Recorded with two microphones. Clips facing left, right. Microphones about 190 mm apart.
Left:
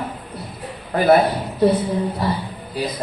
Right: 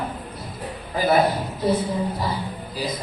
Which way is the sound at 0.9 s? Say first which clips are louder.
Left 4 dB; 65° left (ahead or behind).